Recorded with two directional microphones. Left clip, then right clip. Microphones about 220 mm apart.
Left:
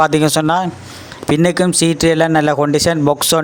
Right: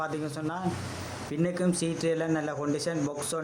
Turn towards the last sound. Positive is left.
turn(degrees=40)  # may be behind; listen again after turning